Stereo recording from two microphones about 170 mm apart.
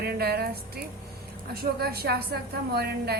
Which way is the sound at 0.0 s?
70° right (ahead or behind).